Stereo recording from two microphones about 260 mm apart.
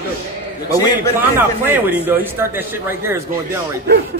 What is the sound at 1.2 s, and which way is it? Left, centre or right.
A man's voice, centre.